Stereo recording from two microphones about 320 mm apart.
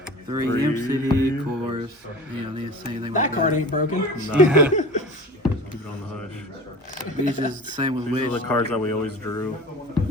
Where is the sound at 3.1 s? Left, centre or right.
Left.